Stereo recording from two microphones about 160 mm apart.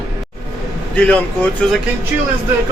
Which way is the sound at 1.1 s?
10° left (ahead or behind).